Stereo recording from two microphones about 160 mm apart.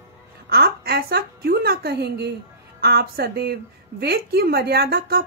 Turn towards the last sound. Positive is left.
turn(degrees=-75)  # may be behind; listen again after turning